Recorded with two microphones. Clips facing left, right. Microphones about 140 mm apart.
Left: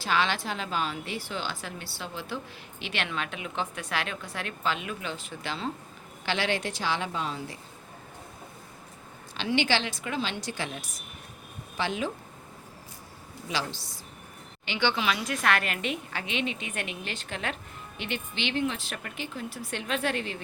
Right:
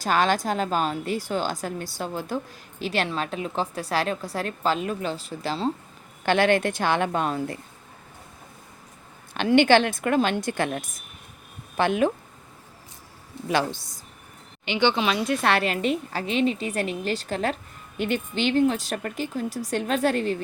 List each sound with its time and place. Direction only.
0.0 s a woman's voice: 45° right (ahead or behind)
6.2 s a woman's voice: 50° right (ahead or behind)
9.3 s a woman's voice: 55° right (ahead or behind)
13.5 s a woman's voice: 55° right (ahead or behind)
14.6 s a woman's voice: 20° right (ahead or behind); by 20.4 s 40° right (ahead or behind)